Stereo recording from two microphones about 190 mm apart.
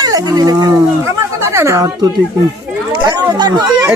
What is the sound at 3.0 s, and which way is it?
Chatter, 20° right (ahead or behind).